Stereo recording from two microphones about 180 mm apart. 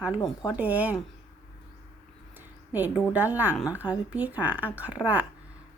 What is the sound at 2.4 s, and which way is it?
A woman's voice, 10° right (ahead or behind).